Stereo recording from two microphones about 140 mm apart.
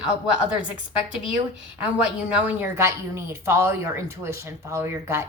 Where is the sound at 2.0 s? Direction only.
10° right (ahead or behind).